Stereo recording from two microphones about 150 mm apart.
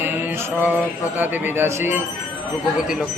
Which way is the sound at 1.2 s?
10° right (ahead or behind).